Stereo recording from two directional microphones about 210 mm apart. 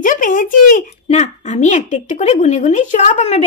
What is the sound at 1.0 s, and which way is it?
A woman's voice, 35° left (ahead or behind).